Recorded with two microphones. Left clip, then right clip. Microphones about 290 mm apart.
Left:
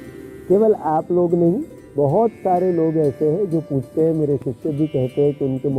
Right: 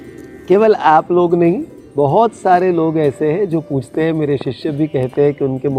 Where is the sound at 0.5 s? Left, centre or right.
Right.